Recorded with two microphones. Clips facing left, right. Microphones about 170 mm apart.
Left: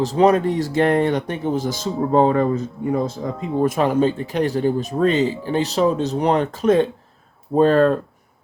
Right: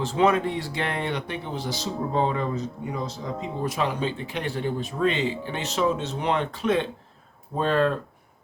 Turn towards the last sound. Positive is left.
turn(degrees=45)  # may be behind; listen again after turning